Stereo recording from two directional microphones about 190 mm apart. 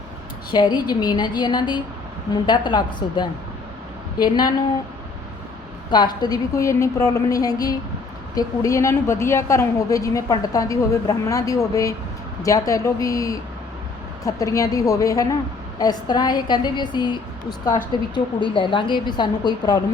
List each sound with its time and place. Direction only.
0.5 s a woman's voice: 25° left (ahead or behind)
5.9 s a woman's voice: 20° left (ahead or behind)